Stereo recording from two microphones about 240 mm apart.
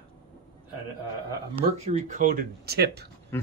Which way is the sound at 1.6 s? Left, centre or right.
Right.